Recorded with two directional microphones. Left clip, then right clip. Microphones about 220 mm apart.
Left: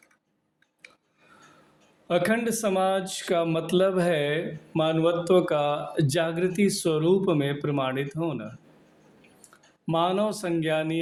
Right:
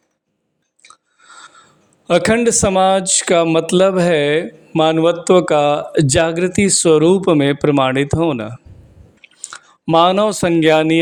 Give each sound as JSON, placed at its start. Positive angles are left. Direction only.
{"t": 2.0, "sound": "speech", "side_deg": -45}